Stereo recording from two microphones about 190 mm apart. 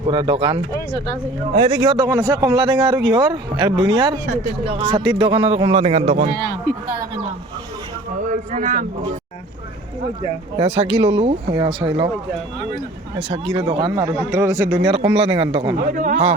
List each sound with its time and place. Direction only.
0.0 s a man's voice: 25° right (ahead or behind)
8.3 s speech: 40° right (ahead or behind)
10.6 s a man's voice: 30° right (ahead or behind)
13.3 s a man's voice: 30° right (ahead or behind)
15.9 s a man's voice: 40° right (ahead or behind)